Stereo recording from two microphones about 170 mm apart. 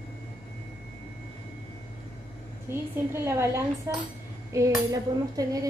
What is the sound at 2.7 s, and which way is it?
Speech, 15° right (ahead or behind).